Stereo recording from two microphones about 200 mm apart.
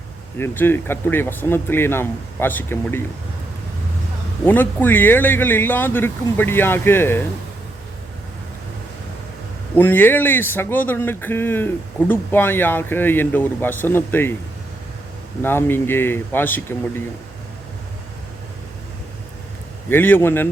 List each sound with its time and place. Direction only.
0.3 s speech: 10° left (ahead or behind)
4.4 s speech: 10° left (ahead or behind)
9.7 s speech: 10° left (ahead or behind)
15.4 s speech: 10° left (ahead or behind)
19.9 s speech: 10° left (ahead or behind)